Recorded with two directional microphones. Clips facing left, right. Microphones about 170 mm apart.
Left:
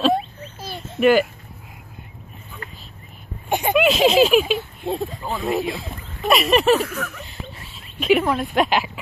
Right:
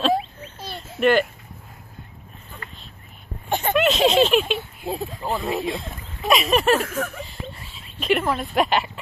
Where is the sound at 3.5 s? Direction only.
15° left (ahead or behind).